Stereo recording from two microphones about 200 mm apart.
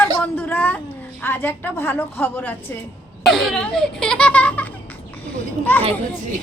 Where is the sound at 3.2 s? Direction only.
Centre (ahead or behind).